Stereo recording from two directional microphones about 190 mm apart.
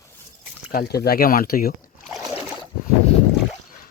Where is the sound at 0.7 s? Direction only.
55° left (ahead or behind).